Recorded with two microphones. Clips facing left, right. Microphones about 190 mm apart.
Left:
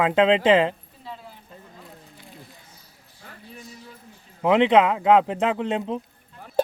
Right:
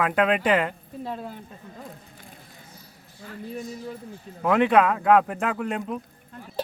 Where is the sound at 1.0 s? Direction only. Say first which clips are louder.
Right 8 dB; 50° right (ahead or behind).